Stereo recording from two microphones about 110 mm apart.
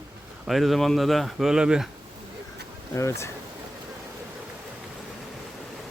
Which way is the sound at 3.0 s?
25° left (ahead or behind).